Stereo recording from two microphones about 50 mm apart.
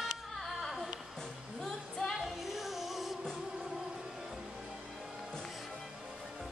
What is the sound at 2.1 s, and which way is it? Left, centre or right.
Music, centre.